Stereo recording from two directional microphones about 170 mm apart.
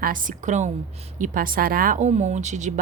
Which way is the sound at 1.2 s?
55° right (ahead or behind).